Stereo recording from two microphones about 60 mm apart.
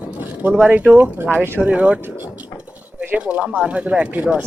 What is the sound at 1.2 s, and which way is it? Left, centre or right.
Speech, right.